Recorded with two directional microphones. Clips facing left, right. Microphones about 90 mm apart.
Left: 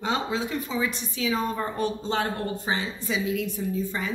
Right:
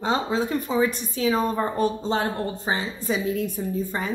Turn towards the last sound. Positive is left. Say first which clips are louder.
# right 2 dB
turn(degrees=-45)  # may be behind; listen again after turning